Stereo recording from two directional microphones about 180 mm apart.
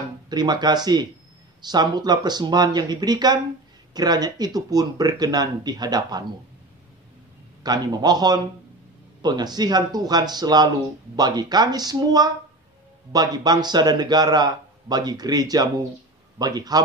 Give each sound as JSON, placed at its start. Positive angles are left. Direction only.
{"t": 0.3, "sound": "a man's voice", "side_deg": -25}
{"t": 7.6, "sound": "a man's voice", "side_deg": -20}